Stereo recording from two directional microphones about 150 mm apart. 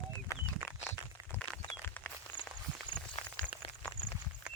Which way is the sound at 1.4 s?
5° left (ahead or behind).